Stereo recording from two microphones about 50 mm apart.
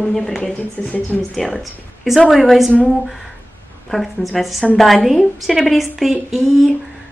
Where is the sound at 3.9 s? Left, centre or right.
Centre.